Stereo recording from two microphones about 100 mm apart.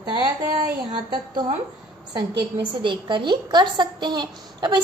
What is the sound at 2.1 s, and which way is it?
A woman's voice, 50° right (ahead or behind).